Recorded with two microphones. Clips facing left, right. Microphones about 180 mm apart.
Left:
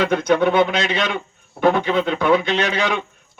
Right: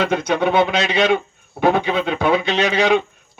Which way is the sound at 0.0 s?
55° left (ahead or behind).